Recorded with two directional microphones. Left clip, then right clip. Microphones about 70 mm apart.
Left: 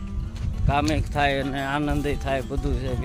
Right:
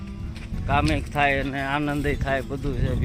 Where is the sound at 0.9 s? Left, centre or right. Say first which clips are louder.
Right 1 dB; left.